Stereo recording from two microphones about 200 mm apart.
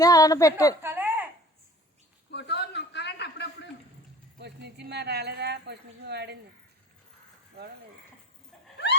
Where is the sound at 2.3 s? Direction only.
60° left (ahead or behind).